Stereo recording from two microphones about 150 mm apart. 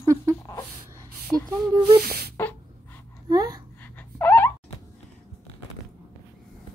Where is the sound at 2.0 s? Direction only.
90° right.